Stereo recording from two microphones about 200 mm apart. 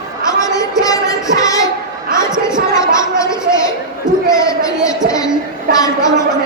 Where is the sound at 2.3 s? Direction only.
5° right (ahead or behind).